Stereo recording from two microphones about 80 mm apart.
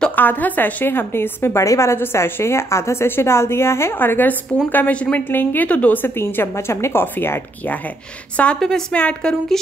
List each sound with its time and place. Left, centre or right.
0.1 s a woman's voice: left
8.5 s a woman's voice: centre
8.9 s speech: centre